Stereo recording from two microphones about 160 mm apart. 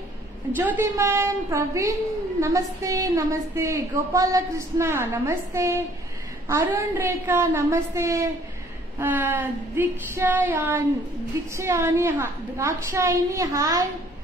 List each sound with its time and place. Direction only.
0.6 s a woman's voice: 15° right (ahead or behind)